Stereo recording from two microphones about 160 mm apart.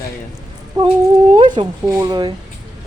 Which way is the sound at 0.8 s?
25° right (ahead or behind).